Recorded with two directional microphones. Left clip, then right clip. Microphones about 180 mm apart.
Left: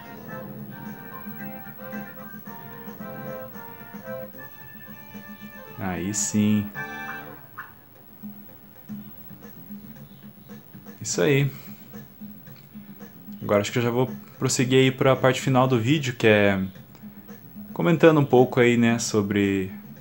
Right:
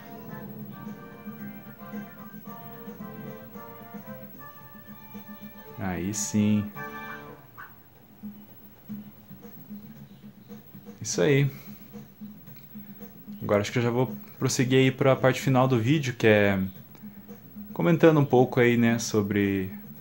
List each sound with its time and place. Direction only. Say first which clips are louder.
5.8 s speech: left 3 dB; centre (ahead or behind)
11.0 s speech: left 2 dB; centre (ahead or behind)
13.5 s speech: left 3 dB; centre (ahead or behind)
17.7 s speech: left 3 dB; centre (ahead or behind)